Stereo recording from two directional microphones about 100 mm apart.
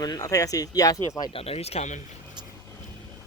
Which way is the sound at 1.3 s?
85° left.